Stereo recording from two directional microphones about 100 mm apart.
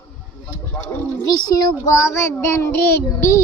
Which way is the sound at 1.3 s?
40° left (ahead or behind).